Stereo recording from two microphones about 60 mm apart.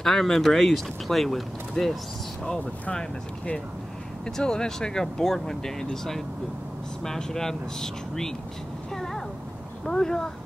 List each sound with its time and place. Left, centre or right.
0.0 s speech: centre
2.6 s speech: centre
8.9 s a sound: centre
9.8 s speech: centre